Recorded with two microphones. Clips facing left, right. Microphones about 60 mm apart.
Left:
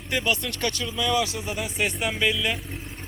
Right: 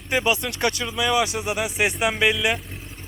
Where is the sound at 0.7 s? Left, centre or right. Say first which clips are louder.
Right 2 dB; centre.